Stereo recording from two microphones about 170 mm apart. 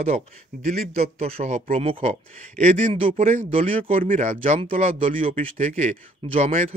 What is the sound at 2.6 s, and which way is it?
Speech, 50° right (ahead or behind).